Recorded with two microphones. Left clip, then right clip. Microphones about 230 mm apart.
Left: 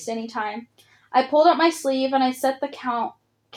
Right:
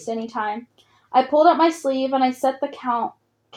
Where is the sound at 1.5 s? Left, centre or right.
Right.